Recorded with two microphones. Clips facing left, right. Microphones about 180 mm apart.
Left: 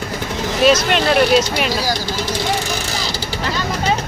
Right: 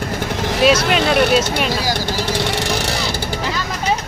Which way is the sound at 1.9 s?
60° right (ahead or behind).